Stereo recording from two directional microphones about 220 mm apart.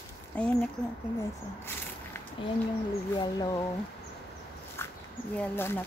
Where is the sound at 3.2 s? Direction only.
20° left (ahead or behind).